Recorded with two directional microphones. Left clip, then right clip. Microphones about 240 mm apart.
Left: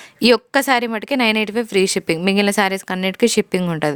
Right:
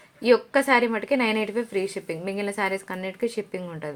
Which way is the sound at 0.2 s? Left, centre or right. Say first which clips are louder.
Left 5 dB; left.